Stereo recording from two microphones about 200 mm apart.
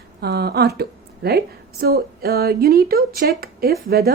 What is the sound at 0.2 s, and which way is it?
A woman's voice, 55° right (ahead or behind).